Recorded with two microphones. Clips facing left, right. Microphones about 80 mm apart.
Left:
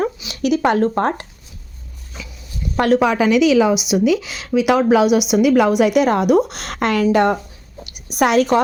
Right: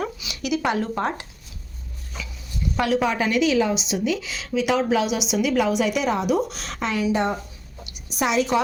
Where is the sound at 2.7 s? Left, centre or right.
Left.